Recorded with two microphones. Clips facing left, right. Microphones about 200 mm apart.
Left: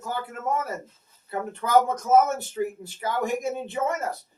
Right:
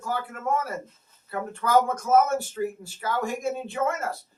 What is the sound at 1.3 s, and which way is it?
A man's voice, 20° left (ahead or behind).